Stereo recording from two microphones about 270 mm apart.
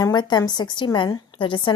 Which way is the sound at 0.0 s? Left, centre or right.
Centre.